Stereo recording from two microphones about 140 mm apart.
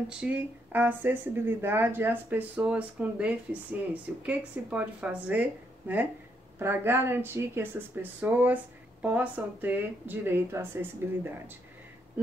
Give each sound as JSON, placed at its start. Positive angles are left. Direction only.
{"t": 0.2, "sound": "speech", "side_deg": -10}